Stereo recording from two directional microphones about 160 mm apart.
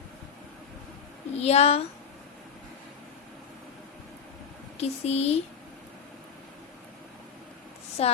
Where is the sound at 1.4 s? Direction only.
40° left (ahead or behind).